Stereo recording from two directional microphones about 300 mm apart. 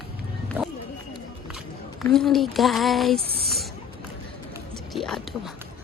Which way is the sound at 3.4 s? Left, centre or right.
Centre.